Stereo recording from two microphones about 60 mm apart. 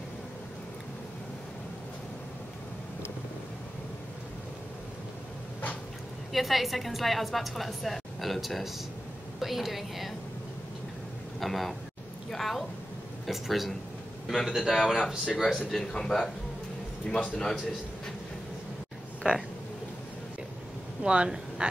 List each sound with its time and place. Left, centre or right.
6.3 s a woman's voice: centre
11.3 s a man's voice: centre
21.0 s speech: centre